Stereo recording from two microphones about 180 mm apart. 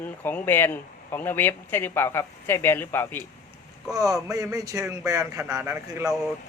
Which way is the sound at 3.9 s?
20° right (ahead or behind).